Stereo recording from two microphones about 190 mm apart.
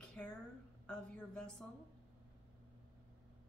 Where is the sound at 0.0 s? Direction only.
5° left (ahead or behind).